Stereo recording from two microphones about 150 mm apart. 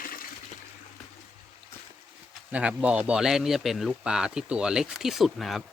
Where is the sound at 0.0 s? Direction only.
70° left (ahead or behind).